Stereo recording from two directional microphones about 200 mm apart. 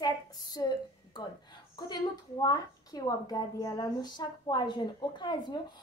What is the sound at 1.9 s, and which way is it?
A woman's voice, 20° left (ahead or behind).